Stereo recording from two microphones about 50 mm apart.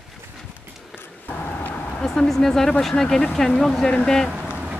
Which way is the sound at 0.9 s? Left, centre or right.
Left.